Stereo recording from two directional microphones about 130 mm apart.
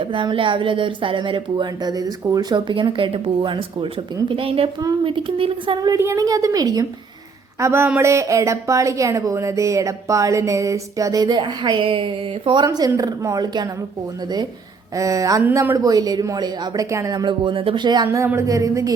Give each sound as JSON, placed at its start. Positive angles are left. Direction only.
{"t": 0.0, "sound": "a woman's voice", "side_deg": -40}
{"t": 6.0, "sound": "speech", "side_deg": -25}
{"t": 12.6, "sound": "speech", "side_deg": -30}
{"t": 14.9, "sound": "speech", "side_deg": -25}